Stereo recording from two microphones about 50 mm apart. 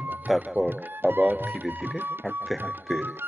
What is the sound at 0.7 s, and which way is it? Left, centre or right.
Speech, right.